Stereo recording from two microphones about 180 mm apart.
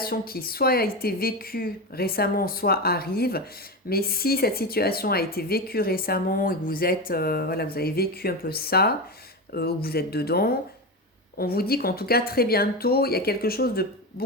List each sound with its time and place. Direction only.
0.0 s speech: 55° left (ahead or behind)